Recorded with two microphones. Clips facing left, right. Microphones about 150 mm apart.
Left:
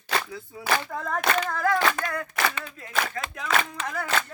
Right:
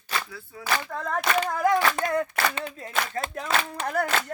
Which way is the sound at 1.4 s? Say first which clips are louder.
Right 1 dB; 15° right (ahead or behind).